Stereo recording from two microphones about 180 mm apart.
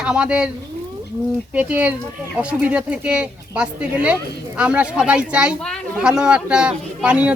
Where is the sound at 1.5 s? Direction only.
10° right (ahead or behind).